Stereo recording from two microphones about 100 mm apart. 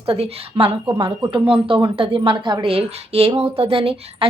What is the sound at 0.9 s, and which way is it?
Speech, 50° right (ahead or behind).